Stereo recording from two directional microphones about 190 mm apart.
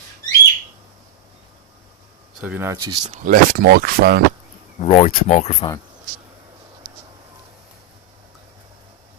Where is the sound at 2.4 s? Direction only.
10° right (ahead or behind).